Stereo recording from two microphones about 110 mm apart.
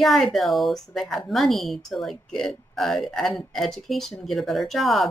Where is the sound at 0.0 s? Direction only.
Centre (ahead or behind).